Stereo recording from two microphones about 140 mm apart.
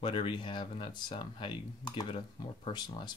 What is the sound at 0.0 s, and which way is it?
Speech, 35° left (ahead or behind).